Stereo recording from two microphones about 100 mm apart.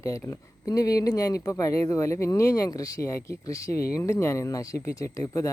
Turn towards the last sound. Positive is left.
turn(degrees=35)  # may be behind; listen again after turning